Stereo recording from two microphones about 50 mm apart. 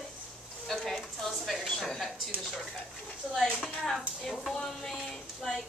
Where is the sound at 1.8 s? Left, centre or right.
Centre.